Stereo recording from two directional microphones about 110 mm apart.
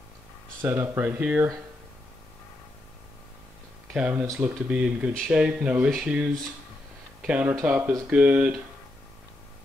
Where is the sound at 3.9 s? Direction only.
15° right (ahead or behind).